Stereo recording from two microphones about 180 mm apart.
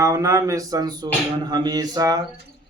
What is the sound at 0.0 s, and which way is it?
A man's voice, 15° right (ahead or behind).